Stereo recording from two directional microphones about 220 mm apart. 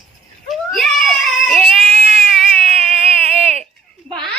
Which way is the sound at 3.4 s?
30° right (ahead or behind).